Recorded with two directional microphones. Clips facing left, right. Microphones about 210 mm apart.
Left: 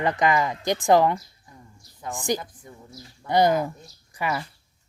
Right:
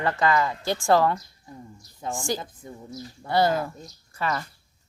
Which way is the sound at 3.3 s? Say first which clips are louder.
Left 2 dB; 15° left (ahead or behind).